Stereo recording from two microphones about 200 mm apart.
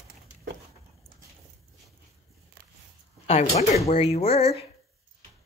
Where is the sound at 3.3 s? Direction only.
35° left (ahead or behind).